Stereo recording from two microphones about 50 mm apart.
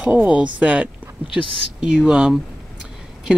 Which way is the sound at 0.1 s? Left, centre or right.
Right.